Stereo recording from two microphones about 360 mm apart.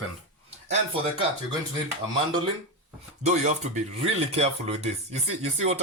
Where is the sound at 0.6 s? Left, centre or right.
Centre.